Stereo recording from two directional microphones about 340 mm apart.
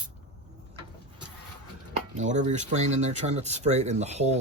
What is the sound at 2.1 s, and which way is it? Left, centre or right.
Speech, right.